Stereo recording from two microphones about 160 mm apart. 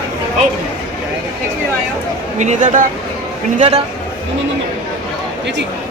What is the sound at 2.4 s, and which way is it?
A man's voice, 50° right (ahead or behind).